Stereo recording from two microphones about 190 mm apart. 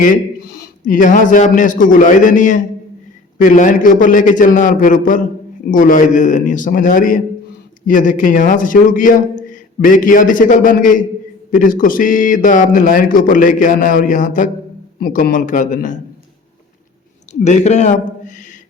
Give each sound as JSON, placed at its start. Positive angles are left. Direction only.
{"t": 0.6, "sound": "a man's voice", "side_deg": 45}
{"t": 17.4, "sound": "a man's voice", "side_deg": 40}